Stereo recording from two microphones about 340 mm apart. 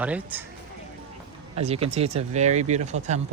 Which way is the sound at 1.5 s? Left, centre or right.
Centre.